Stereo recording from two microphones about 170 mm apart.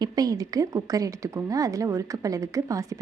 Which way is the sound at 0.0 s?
20° right (ahead or behind).